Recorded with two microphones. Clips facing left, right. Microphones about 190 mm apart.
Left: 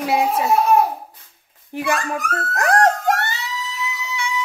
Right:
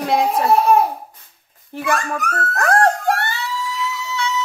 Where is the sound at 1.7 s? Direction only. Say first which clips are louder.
Right 1 dB; 15° left (ahead or behind).